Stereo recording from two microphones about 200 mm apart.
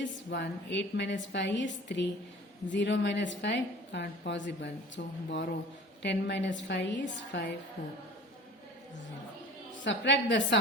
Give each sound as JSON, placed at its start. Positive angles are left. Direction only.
{"t": 0.0, "sound": "a woman's voice", "side_deg": 60}
{"t": 9.8, "sound": "a woman's voice", "side_deg": 65}